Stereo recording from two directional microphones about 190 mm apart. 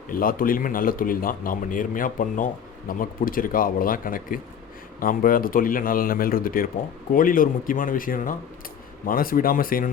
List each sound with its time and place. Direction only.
0.1 s speech: 50° left (ahead or behind)